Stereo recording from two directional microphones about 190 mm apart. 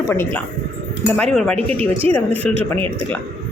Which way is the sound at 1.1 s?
Centre (ahead or behind).